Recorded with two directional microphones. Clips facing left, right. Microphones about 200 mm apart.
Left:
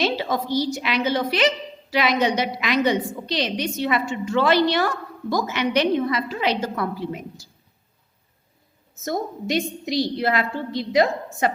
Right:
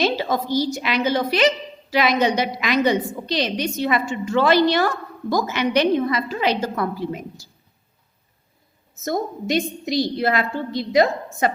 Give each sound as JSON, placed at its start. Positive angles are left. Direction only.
{"t": 0.0, "sound": "a woman's voice", "side_deg": -45}
{"t": 9.0, "sound": "a woman's voice", "side_deg": -45}